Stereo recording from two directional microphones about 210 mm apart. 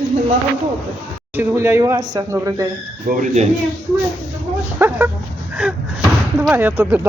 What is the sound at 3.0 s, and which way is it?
Speech, 35° right (ahead or behind).